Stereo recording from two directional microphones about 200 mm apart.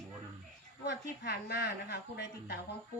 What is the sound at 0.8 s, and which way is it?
A woman's voice, 55° left (ahead or behind).